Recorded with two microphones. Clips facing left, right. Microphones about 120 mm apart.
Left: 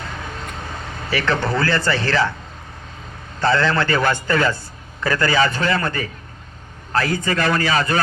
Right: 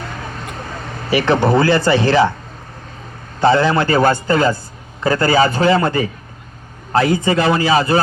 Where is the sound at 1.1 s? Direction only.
30° right (ahead or behind).